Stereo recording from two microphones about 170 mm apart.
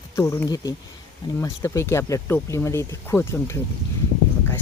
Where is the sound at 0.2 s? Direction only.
15° left (ahead or behind).